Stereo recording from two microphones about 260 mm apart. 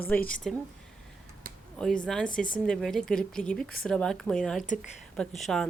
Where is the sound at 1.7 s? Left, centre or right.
Centre.